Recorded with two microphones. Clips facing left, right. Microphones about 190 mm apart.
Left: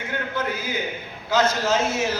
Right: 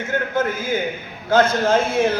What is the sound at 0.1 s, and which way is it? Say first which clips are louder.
A man's voice: right 6 dB; 50° right (ahead or behind).